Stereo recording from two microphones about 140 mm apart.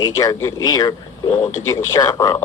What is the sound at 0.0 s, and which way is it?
A man's voice, 25° left (ahead or behind).